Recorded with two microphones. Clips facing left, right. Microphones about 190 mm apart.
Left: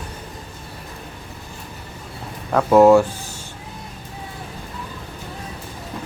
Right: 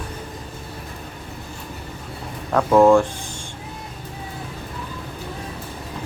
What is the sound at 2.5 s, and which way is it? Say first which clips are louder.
Speech: left 2 dB; 10° left (ahead or behind).